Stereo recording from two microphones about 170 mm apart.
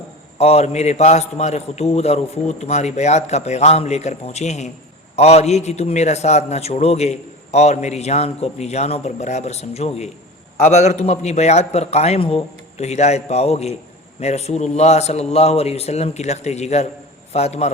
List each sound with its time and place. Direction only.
0.3 s a man's voice: 40° left (ahead or behind)